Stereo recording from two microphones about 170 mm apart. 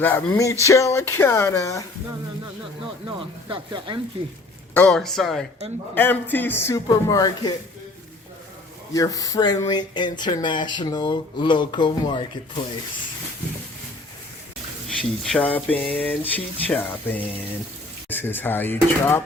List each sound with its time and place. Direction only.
0.0 s speech: 15° left (ahead or behind)
3.2 s speech: 30° right (ahead or behind)
4.7 s speech: 5° left (ahead or behind)
8.9 s speech: 20° left (ahead or behind)
14.8 s speech: 5° left (ahead or behind)